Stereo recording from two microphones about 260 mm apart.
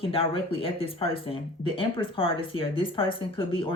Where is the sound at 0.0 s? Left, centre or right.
Left.